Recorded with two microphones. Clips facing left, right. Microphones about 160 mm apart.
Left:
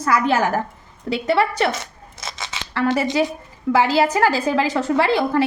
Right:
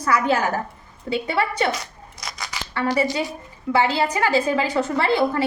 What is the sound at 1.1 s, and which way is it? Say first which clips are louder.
Speech: left 4 dB; 90° left.